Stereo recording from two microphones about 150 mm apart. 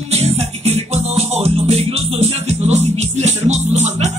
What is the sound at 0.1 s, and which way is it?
Music, 45° right (ahead or behind).